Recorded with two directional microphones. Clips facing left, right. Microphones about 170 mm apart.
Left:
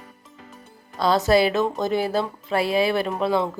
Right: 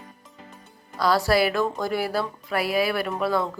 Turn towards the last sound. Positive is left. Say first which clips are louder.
# left 2 dB
turn(degrees=25)  # may be behind; listen again after turning